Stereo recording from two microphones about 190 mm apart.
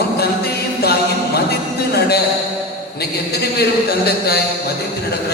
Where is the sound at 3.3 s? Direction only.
55° left (ahead or behind).